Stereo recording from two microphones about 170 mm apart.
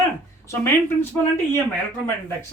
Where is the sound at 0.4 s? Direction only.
15° left (ahead or behind).